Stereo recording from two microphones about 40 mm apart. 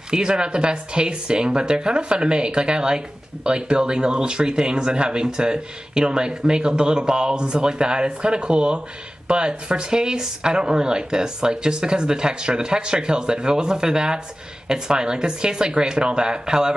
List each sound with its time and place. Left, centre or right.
0.1 s speech: right